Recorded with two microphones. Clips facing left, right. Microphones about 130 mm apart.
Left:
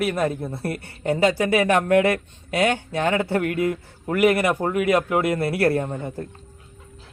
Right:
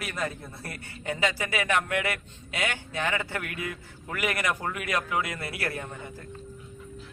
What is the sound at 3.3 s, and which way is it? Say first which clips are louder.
Speech: left 13 dB; 35° left (ahead or behind).